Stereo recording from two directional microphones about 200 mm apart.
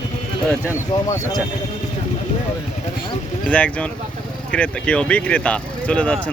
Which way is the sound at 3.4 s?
5° left (ahead or behind).